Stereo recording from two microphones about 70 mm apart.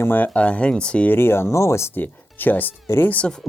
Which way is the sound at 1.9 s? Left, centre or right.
Left.